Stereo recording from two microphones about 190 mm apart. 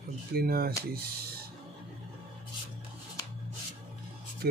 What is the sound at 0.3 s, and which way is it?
Speech, 50° right (ahead or behind).